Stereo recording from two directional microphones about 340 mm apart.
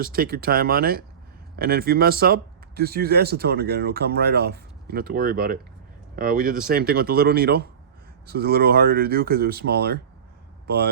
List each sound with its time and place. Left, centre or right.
0.0 s speech: right